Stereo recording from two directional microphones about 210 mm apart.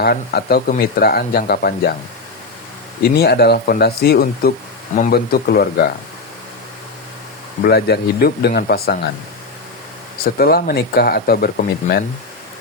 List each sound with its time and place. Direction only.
0.0 s speech: 50° left (ahead or behind)
3.0 s speech: 50° left (ahead or behind)
7.6 s speech: 50° left (ahead or behind)
10.2 s speech: 45° left (ahead or behind)